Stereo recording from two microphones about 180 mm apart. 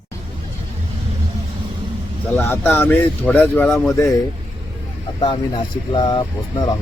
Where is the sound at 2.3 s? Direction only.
10° left (ahead or behind).